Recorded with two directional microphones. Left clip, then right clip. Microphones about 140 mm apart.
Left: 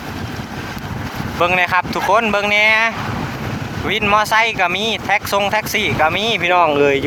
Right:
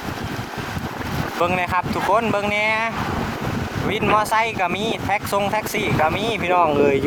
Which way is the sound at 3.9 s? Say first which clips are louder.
Left 4 dB; 10° right (ahead or behind).